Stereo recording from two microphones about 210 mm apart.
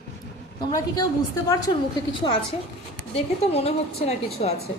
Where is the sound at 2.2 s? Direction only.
25° left (ahead or behind).